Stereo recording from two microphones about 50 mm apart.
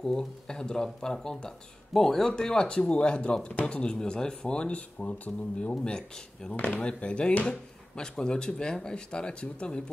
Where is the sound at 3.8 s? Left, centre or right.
Centre.